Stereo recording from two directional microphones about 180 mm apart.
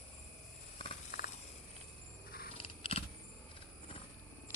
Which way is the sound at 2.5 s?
30° left (ahead or behind).